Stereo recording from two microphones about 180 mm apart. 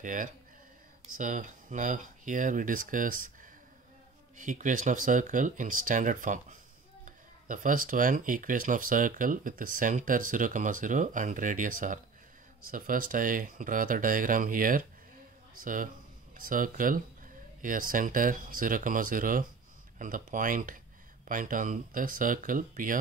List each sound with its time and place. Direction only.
0.0 s speech: 50° right (ahead or behind)
4.4 s speech: 45° right (ahead or behind)